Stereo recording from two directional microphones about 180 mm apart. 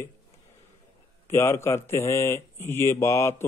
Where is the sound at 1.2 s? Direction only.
15° left (ahead or behind).